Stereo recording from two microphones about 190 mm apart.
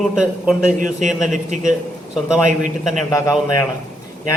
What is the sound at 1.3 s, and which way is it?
Speech, 40° right (ahead or behind).